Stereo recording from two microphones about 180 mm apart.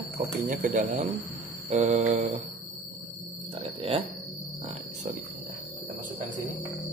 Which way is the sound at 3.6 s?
30° right (ahead or behind).